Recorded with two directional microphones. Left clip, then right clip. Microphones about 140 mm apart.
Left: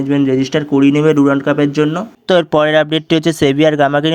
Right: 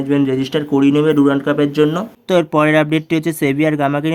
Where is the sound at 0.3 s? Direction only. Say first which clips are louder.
Left 3 dB; 15° left (ahead or behind).